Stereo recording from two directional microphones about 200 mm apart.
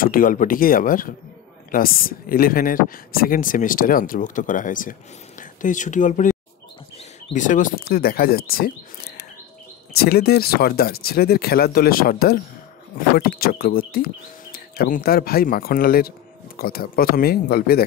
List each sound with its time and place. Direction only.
0.0 s speech: 45° left (ahead or behind)
7.3 s speech: 40° left (ahead or behind)
9.9 s speech: 50° left (ahead or behind)